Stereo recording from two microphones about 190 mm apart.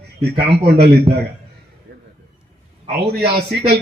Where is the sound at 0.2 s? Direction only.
55° right (ahead or behind).